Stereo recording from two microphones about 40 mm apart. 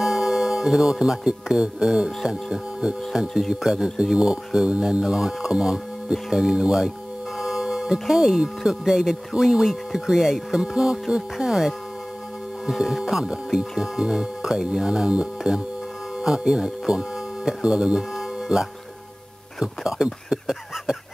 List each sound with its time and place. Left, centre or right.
0.0 s speech: centre
18.1 s music: centre
19.6 s speech: centre